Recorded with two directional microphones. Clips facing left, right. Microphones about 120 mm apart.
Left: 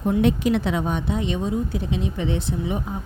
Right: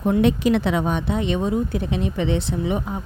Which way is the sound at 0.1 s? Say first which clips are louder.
Right 2 dB; 90° right.